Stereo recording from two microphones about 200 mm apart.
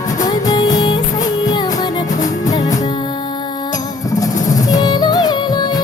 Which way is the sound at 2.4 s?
15° left (ahead or behind).